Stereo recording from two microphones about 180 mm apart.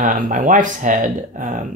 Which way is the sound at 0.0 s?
45° right (ahead or behind).